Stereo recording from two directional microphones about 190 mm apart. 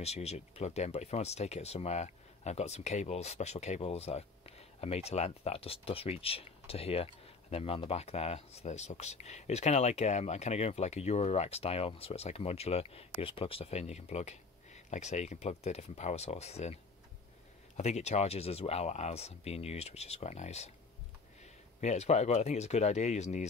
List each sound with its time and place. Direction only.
0.0 s speech: 35° left (ahead or behind)
17.7 s speech: 35° left (ahead or behind)
21.8 s speech: 35° left (ahead or behind)